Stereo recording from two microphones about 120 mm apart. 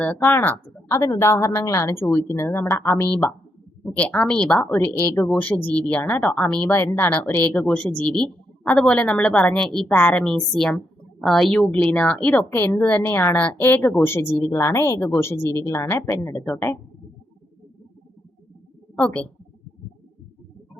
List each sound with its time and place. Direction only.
0.0 s a woman's voice: 15° left (ahead or behind)
9.8 s a woman's voice: 15° left (ahead or behind)
18.9 s a woman's voice: 10° left (ahead or behind)